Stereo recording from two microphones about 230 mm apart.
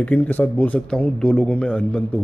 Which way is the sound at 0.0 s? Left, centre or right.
Centre.